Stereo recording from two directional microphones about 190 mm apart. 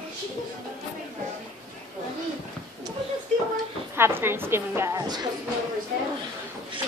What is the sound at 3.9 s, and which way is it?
A woman's voice, 10° right (ahead or behind).